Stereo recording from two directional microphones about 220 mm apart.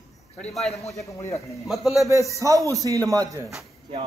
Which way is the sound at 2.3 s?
15° right (ahead or behind).